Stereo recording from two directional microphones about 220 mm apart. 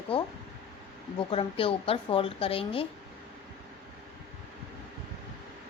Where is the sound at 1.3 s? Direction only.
25° left (ahead or behind).